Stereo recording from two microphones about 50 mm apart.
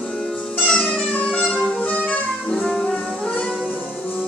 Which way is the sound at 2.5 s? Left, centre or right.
Centre.